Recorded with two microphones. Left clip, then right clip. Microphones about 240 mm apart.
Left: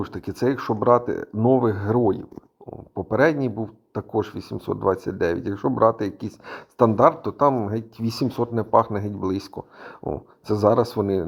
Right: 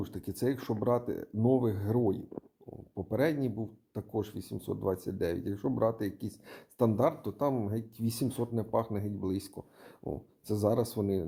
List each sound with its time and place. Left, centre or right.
0.0 s speech: centre
3.1 s speech: left